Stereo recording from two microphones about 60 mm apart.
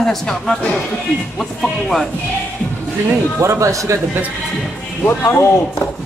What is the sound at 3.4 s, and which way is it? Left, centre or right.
Speech, right.